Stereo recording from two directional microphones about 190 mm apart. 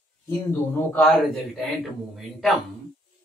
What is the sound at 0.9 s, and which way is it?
Speech, centre (ahead or behind).